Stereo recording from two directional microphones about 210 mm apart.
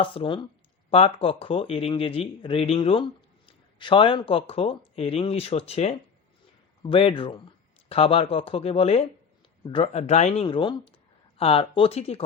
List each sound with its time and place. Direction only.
0.0 s speech: 25° left (ahead or behind)